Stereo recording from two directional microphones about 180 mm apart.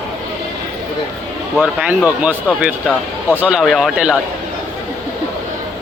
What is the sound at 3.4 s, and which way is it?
Speech, 5° right (ahead or behind).